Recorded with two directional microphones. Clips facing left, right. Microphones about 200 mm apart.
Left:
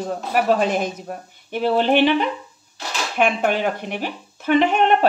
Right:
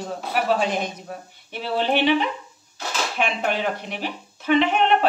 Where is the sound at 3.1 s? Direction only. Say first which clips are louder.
Left 6 dB; 50° left (ahead or behind).